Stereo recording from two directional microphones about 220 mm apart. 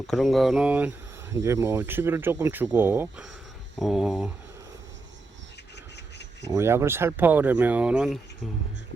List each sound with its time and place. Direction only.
0.1 s speech: centre (ahead or behind)
5.7 s rub: 50° left (ahead or behind)
6.5 s speech: 10° right (ahead or behind)